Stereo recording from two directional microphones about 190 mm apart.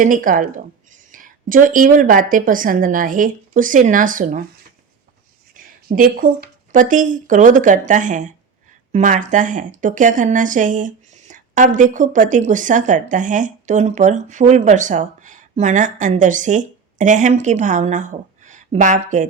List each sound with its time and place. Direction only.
0.0 s a woman's voice: 45° right (ahead or behind)
5.5 s speech: 45° right (ahead or behind)